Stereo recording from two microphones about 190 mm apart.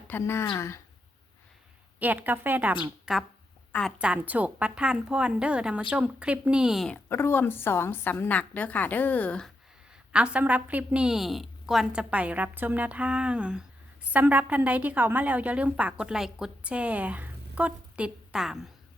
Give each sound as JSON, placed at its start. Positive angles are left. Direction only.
{"t": 0.1, "sound": "a woman's voice", "side_deg": 10}
{"t": 2.0, "sound": "a woman's voice", "side_deg": -10}
{"t": 3.9, "sound": "a woman's voice", "side_deg": -5}
{"t": 7.1, "sound": "a woman's voice", "side_deg": 10}
{"t": 10.1, "sound": "a woman's voice", "side_deg": -5}